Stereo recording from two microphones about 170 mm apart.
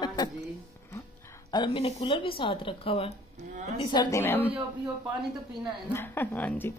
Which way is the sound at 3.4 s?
45° right (ahead or behind).